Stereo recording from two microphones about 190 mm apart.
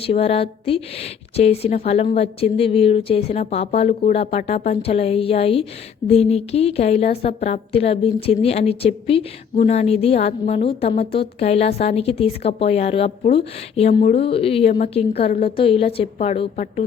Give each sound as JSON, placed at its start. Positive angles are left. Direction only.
{"t": 0.0, "sound": "a woman's voice", "side_deg": 30}